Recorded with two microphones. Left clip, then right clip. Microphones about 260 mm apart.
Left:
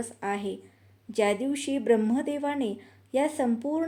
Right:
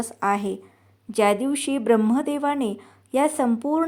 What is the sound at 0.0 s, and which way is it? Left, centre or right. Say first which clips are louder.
Speech: right 8 dB; right.